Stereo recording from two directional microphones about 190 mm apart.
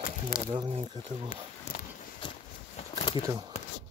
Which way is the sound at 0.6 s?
25° right (ahead or behind).